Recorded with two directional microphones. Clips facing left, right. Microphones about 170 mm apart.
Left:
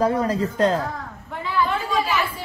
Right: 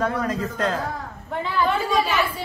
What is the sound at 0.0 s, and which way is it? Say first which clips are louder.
Speech: left 4 dB; 35° left (ahead or behind).